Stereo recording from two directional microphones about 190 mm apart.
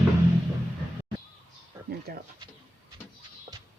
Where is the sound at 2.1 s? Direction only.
55° right (ahead or behind).